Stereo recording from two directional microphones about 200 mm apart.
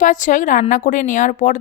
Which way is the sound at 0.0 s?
40° left (ahead or behind).